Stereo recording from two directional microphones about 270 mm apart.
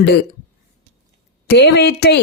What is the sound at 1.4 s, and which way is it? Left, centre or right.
Speech, left.